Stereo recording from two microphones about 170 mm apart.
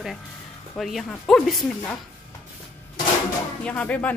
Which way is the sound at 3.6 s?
10° left (ahead or behind).